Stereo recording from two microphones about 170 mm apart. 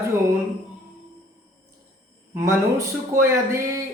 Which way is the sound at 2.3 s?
15° right (ahead or behind).